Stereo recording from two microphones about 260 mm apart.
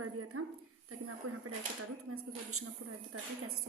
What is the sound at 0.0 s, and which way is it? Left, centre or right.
A woman's voice, right.